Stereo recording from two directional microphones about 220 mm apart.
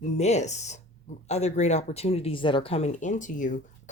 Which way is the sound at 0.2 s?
30° left (ahead or behind).